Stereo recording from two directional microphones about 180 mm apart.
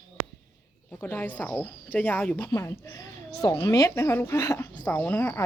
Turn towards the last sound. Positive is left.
turn(degrees=10)  # may be behind; listen again after turning